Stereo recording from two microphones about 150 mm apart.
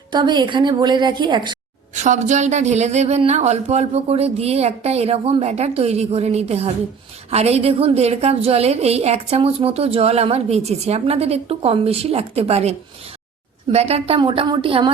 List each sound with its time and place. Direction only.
0.1 s a woman's voice: 30° right (ahead or behind)
2.0 s a woman's voice: 50° right (ahead or behind)
13.7 s a woman's voice: 45° right (ahead or behind)